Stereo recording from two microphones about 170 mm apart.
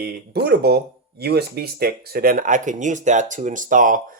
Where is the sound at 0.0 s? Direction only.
70° right (ahead or behind).